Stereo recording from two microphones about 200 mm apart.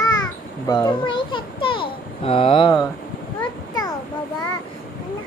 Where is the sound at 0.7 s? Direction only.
20° left (ahead or behind).